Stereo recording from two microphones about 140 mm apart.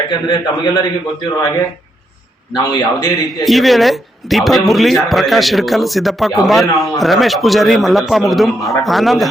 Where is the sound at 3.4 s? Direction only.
Centre (ahead or behind).